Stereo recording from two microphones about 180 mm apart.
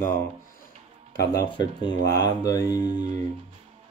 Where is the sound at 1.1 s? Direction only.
65° left (ahead or behind).